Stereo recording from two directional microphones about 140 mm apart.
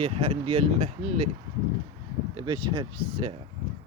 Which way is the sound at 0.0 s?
45° right (ahead or behind).